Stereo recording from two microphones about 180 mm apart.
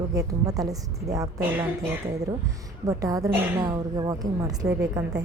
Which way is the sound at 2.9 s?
20° right (ahead or behind).